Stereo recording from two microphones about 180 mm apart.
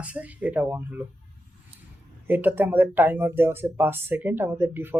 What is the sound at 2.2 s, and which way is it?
Speech, 10° right (ahead or behind).